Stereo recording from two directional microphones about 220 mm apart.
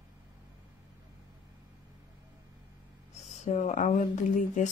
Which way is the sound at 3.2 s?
30° left (ahead or behind).